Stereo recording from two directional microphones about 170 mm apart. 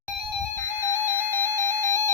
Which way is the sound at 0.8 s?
10° right (ahead or behind).